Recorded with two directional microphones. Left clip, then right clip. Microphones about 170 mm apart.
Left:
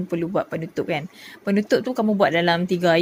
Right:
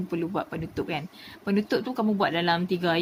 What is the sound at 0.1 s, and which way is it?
Speech, 30° left (ahead or behind).